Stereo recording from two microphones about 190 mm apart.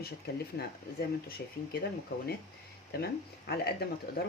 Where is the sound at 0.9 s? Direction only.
55° left (ahead or behind).